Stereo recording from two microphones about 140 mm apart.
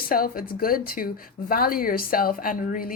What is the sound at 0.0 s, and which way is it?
Speech, 90° left.